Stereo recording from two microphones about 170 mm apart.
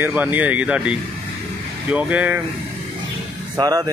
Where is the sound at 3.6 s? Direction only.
20° right (ahead or behind).